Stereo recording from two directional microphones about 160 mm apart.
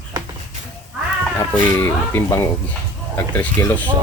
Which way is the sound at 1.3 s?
15° left (ahead or behind).